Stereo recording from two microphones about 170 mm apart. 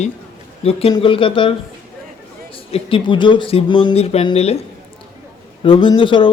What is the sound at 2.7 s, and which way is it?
Speech, 30° left (ahead or behind).